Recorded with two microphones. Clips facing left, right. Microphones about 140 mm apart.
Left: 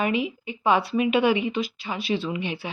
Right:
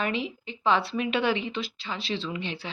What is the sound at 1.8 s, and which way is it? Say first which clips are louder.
Speech: left 4 dB; 20° left (ahead or behind).